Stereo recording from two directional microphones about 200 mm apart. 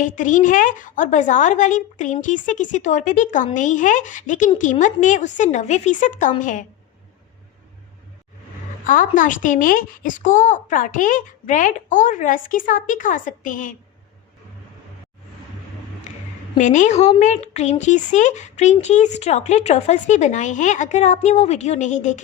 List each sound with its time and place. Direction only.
0.0 s a woman's voice: 40° left (ahead or behind)
8.9 s a woman's voice: 40° left (ahead or behind)
16.6 s a woman's voice: 40° left (ahead or behind)